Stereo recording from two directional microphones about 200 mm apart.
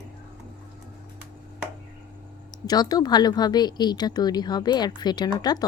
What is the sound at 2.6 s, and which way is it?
Speech, 20° left (ahead or behind).